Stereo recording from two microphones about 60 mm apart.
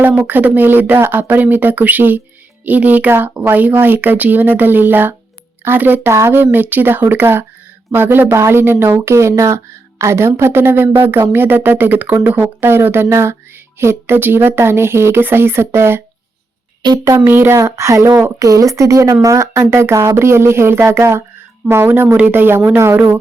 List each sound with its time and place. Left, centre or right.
0.1 s speech: right
6.1 s speech: right
8.3 s speech: right
17.2 s speech: right
17.5 s speech: right